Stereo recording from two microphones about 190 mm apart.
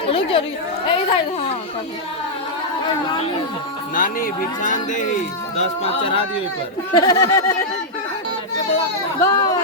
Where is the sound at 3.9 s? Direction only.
45° left (ahead or behind).